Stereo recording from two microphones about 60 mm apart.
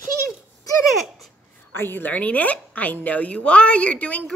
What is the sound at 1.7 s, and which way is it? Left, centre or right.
Speech, left.